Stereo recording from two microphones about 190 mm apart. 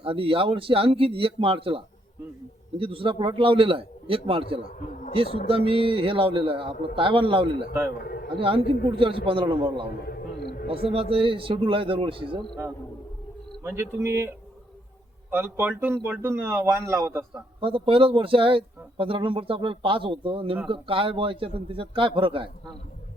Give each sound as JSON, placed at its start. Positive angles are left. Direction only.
{"t": 0.0, "sound": "speech", "side_deg": -30}
{"t": 8.0, "sound": "a man's voice", "side_deg": 55}
{"t": 8.4, "sound": "speech", "side_deg": -30}
{"t": 10.0, "sound": "a sound", "side_deg": 55}
{"t": 10.8, "sound": "speech", "side_deg": -30}
{"t": 13.7, "sound": "speech", "side_deg": -15}
{"t": 17.6, "sound": "speech", "side_deg": -30}